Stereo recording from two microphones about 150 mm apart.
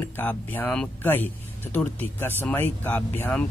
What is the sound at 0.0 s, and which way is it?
Speech, 15° left (ahead or behind).